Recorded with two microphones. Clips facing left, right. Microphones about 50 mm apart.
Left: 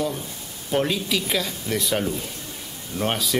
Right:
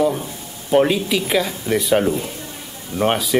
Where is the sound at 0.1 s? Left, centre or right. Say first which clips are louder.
Right 6 dB; right.